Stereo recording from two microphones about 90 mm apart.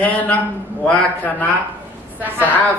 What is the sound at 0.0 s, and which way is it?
A woman's voice, 15° left (ahead or behind).